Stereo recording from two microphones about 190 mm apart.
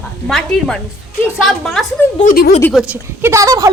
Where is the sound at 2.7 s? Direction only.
5° right (ahead or behind).